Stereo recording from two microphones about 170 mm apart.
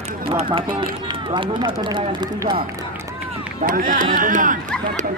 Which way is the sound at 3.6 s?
55° right (ahead or behind).